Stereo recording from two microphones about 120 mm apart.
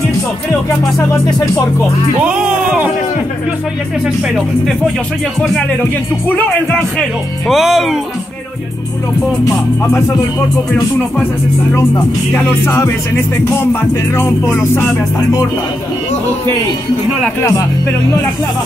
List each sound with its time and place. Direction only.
0.9 s music: 25° left (ahead or behind)
2.2 s speech: 10° right (ahead or behind)
4.0 s speech: 5° right (ahead or behind)
6.2 s music: 15° left (ahead or behind)
6.8 s speech: 5° left (ahead or behind)
9.4 s music: 25° left (ahead or behind)
12.6 s music: 25° left (ahead or behind)
17.4 s music: 25° left (ahead or behind)